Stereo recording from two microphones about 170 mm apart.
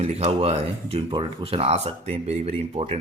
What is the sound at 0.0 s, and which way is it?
Speech, 40° right (ahead or behind).